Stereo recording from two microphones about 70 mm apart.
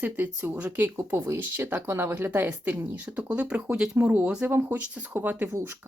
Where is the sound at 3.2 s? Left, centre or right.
Centre.